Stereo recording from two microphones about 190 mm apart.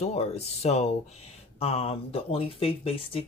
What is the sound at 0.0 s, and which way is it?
Speech, 35° left (ahead or behind).